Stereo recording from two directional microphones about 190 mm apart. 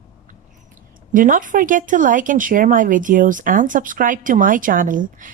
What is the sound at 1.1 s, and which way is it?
Speech, 45° right (ahead or behind).